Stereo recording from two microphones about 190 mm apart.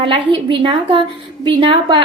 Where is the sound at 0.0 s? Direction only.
25° right (ahead or behind).